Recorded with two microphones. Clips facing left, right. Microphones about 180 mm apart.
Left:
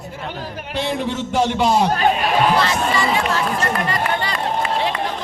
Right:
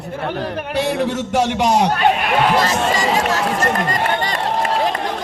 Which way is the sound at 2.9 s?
40° right (ahead or behind).